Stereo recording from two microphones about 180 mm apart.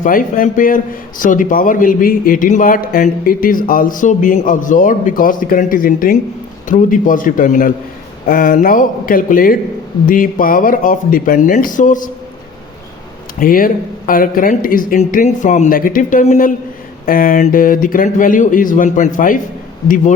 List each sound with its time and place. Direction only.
0.0 s a man's voice: 50° left (ahead or behind)
13.4 s a man's voice: 50° left (ahead or behind)